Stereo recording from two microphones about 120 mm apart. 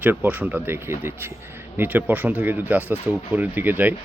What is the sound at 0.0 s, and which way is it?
Speech, 15° right (ahead or behind).